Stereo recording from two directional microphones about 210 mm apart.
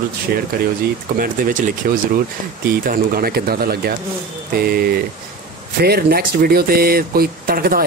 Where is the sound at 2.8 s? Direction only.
45° right (ahead or behind).